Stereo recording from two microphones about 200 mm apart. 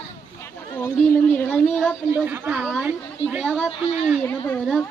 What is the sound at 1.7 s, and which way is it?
A woman's voice, centre (ahead or behind).